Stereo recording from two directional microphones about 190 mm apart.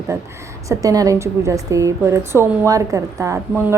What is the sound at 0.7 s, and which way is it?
A woman's voice, 20° right (ahead or behind).